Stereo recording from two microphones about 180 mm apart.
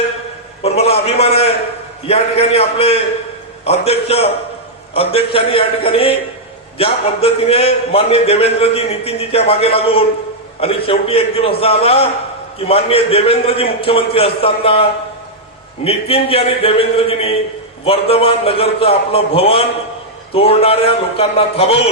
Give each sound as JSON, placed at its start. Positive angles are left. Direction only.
{"t": 0.6, "sound": "a man's voice", "side_deg": 35}